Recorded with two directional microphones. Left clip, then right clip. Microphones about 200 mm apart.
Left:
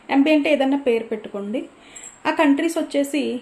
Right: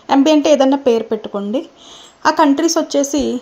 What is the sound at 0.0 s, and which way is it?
Speech, 40° right (ahead or behind).